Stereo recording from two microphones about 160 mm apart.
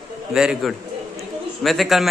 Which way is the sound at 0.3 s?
5° right (ahead or behind).